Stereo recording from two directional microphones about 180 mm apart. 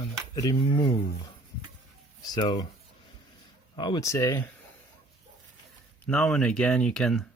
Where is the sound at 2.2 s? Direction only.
20° left (ahead or behind).